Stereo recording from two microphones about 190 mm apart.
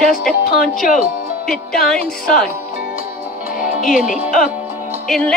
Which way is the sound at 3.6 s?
45° left (ahead or behind).